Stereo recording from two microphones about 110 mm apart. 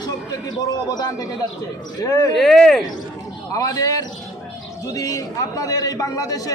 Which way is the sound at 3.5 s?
30° left (ahead or behind).